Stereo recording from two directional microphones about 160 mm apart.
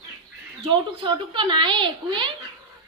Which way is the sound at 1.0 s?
30° right (ahead or behind).